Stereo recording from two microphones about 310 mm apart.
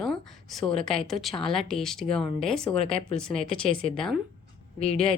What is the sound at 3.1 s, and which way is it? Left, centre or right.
A woman's voice, centre.